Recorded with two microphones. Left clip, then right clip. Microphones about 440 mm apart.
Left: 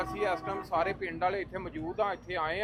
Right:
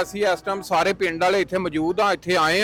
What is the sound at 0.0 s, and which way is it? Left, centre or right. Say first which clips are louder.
Speech: right 10 dB; right.